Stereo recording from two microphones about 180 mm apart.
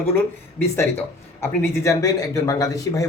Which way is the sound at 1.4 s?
15° left (ahead or behind).